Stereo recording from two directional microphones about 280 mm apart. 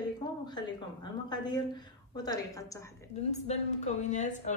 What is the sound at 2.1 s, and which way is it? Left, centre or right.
Speech, centre.